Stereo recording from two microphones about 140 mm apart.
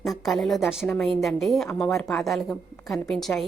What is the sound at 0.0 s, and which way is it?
A woman's voice, centre (ahead or behind).